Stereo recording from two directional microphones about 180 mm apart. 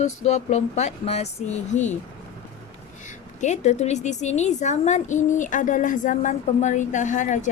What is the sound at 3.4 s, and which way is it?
A woman's voice, 40° left (ahead or behind).